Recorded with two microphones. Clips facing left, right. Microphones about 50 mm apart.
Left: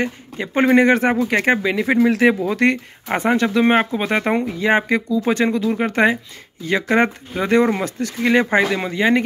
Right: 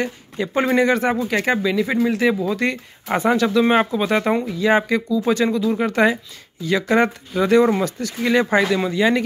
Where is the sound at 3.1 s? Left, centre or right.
Left.